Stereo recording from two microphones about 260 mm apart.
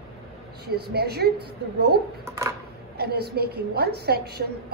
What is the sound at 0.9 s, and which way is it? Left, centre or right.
Speech, right.